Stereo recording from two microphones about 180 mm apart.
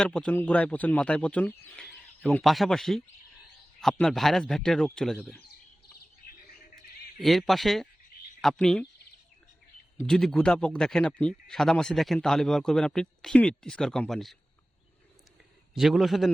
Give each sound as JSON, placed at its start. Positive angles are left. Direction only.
{"t": 0.0, "sound": "speech", "side_deg": 5}
{"t": 7.2, "sound": "speech", "side_deg": 0}
{"t": 10.1, "sound": "speech", "side_deg": 5}
{"t": 15.7, "sound": "speech", "side_deg": 0}